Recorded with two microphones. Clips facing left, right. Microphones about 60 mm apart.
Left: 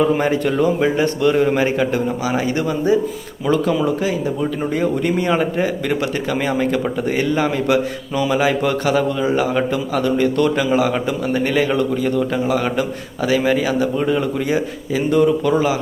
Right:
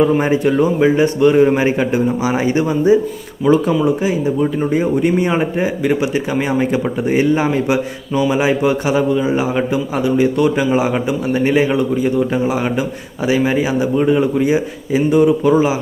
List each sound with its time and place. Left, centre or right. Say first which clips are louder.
0.2 s a man's voice: right 3 dB; centre
8.1 s speech: right 3 dB; centre
8.4 s speech: right 2 dB; centre